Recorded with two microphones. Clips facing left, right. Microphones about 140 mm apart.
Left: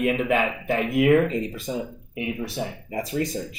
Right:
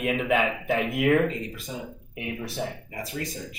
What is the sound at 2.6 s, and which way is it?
Speech, 5° left (ahead or behind).